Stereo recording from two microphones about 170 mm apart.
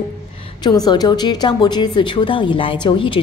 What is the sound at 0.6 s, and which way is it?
A woman's voice, 25° left (ahead or behind).